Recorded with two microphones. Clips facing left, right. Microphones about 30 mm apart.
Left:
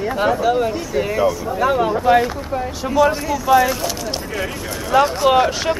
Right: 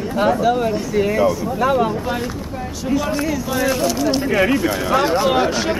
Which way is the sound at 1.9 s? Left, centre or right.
Left.